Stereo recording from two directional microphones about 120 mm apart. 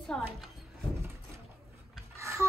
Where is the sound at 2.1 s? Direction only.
25° right (ahead or behind).